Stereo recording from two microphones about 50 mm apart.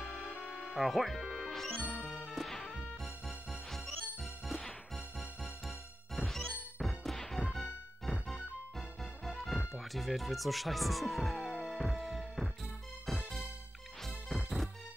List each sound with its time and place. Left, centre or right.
0.0 s music: centre
2.0 s music: right
2.2 s music: centre
6.8 s smash: centre
8.0 s music: centre
9.8 s speech: centre
11.5 s music: centre
14.0 s music: centre